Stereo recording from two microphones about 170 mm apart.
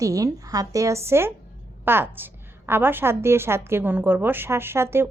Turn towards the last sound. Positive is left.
turn(degrees=-15)  # may be behind; listen again after turning